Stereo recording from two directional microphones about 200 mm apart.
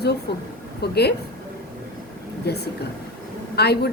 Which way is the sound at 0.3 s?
55° left (ahead or behind).